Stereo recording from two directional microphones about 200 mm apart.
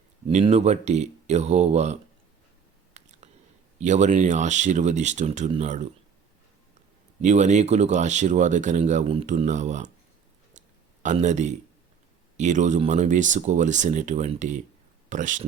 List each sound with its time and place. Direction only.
0.3 s speech: 30° right (ahead or behind)
2.9 s biting: 35° right (ahead or behind)
3.8 s speech: 35° right (ahead or behind)
7.2 s speech: 35° right (ahead or behind)
11.0 s speech: 35° right (ahead or behind)